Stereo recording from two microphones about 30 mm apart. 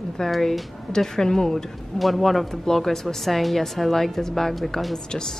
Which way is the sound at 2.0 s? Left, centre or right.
Centre.